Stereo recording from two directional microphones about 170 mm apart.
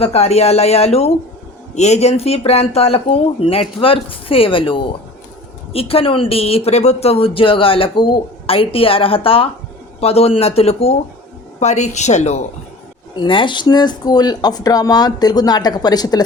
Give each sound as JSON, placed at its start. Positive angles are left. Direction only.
{"t": 0.0, "sound": "speech", "side_deg": 35}
{"t": 13.1, "sound": "speech", "side_deg": 30}